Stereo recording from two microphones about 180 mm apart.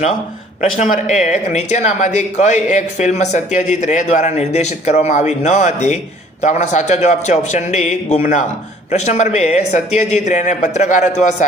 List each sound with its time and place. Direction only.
0.6 s speech: 40° left (ahead or behind)